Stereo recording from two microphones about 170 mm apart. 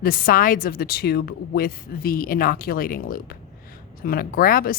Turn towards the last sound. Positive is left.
turn(degrees=60)  # may be behind; listen again after turning